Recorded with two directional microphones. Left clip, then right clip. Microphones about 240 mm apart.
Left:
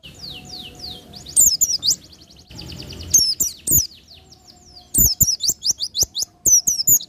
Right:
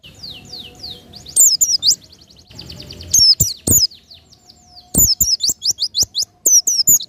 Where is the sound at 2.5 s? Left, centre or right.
Right.